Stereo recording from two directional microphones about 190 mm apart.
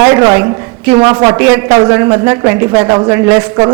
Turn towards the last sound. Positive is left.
turn(degrees=-15)  # may be behind; listen again after turning